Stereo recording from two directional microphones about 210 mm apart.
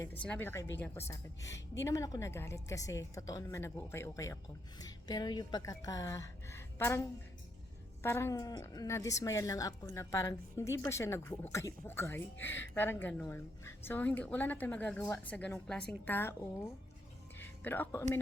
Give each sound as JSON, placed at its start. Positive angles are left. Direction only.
{"t": 0.1, "sound": "a woman's voice", "side_deg": 5}
{"t": 8.0, "sound": "a woman's voice", "side_deg": 10}
{"t": 17.4, "sound": "music", "side_deg": 10}